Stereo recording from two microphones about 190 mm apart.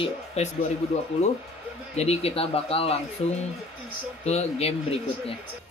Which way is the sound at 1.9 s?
35° left (ahead or behind).